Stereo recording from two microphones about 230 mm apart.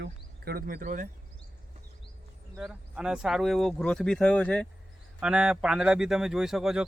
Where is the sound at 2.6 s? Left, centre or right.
Centre.